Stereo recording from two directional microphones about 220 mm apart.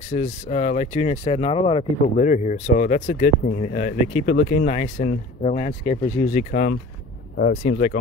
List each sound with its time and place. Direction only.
0.1 s speech: 30° left (ahead or behind)